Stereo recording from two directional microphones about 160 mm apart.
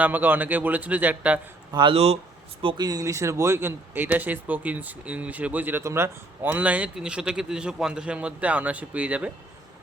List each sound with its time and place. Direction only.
0.0 s speech: 10° right (ahead or behind)
1.7 s speech: 30° right (ahead or behind); by 9.3 s 10° right (ahead or behind)